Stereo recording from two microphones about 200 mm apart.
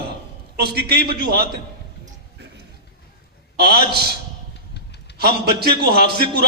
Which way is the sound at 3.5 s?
50° right (ahead or behind).